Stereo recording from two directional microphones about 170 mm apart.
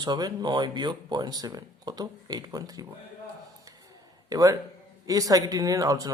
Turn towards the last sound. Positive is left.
turn(degrees=-20)  # may be behind; listen again after turning